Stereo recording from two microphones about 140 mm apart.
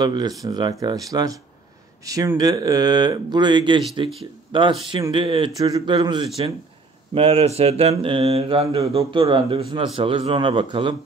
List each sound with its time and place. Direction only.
0.0 s speech: 30° right (ahead or behind)
7.2 s mantra: 45° right (ahead or behind)
9.9 s speech: 40° right (ahead or behind)